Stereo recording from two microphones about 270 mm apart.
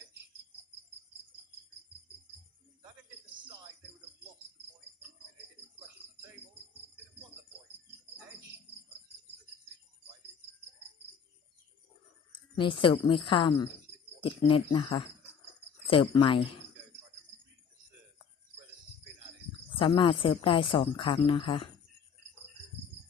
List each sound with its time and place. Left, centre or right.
12.5 s a woman's voice: centre
19.8 s speech: centre